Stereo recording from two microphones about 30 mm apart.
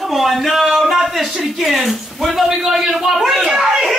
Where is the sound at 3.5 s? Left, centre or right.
Centre.